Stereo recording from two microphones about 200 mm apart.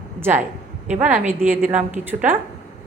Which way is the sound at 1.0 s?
40° right (ahead or behind).